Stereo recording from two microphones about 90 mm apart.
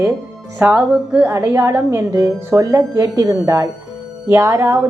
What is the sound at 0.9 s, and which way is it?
Speech, 10° right (ahead or behind).